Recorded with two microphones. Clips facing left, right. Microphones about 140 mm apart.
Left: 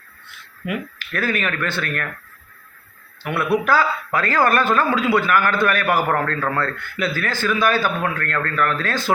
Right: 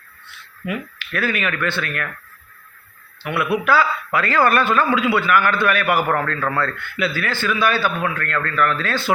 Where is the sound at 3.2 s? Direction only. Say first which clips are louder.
Even; 40° left (ahead or behind).